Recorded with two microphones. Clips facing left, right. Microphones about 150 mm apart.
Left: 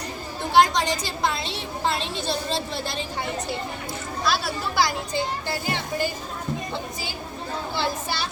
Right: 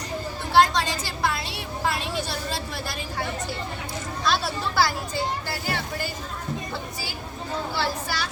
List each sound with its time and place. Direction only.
0.5 s a woman's voice: 15° left (ahead or behind)
4.2 s speech: 5° left (ahead or behind)
4.7 s a child's voice: 15° left (ahead or behind)
7.8 s a child's voice: 25° left (ahead or behind)